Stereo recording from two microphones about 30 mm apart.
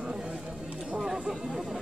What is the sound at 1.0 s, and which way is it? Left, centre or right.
Speech, centre.